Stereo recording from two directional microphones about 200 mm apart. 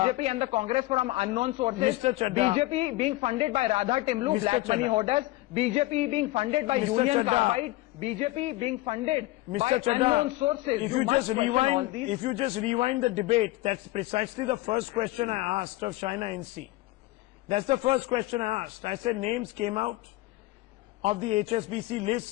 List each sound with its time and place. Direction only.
0.0 s a man's voice: 30° right (ahead or behind)
17.5 s a man's voice: 30° right (ahead or behind)
19.6 s a man's voice: 30° right (ahead or behind)
21.0 s a man's voice: 30° right (ahead or behind)